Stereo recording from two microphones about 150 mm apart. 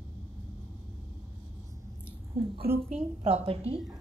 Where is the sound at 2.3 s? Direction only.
40° right (ahead or behind).